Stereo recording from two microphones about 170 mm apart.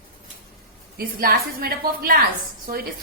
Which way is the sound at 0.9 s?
60° right (ahead or behind).